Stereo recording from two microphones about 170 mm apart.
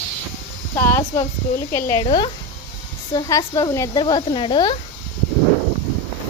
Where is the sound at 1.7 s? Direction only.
15° left (ahead or behind).